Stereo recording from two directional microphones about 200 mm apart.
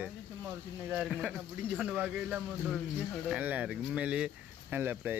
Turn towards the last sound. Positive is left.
turn(degrees=-10)  # may be behind; listen again after turning